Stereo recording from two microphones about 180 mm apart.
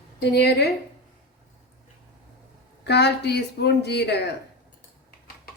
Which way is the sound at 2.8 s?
70° left (ahead or behind).